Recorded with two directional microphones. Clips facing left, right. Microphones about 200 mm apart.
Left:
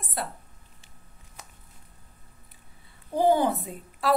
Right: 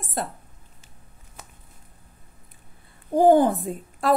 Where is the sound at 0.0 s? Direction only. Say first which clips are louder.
Right 4 dB; 45° right (ahead or behind).